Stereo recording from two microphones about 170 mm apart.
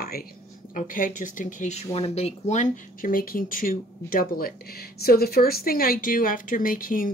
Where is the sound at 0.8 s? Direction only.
50° left (ahead or behind).